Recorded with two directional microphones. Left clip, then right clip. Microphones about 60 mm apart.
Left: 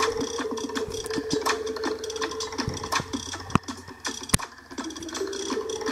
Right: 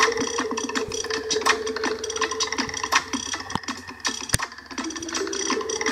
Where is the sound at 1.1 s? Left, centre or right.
Centre.